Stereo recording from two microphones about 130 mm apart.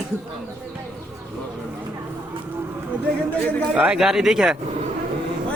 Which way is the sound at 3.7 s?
5° right (ahead or behind).